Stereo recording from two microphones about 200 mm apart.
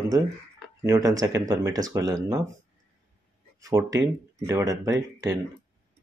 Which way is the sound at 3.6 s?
15° right (ahead or behind).